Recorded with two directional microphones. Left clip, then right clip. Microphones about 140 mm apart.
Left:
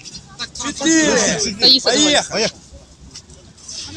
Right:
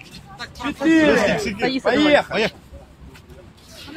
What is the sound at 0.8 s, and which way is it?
A man's voice, 50° right (ahead or behind).